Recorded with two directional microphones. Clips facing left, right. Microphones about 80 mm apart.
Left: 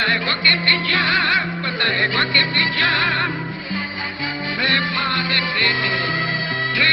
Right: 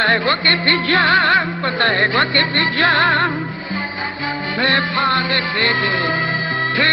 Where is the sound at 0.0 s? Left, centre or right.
Right.